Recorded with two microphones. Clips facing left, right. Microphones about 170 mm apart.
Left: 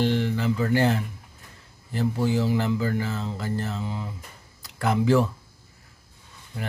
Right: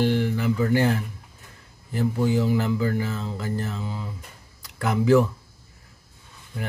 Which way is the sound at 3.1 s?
20° left (ahead or behind).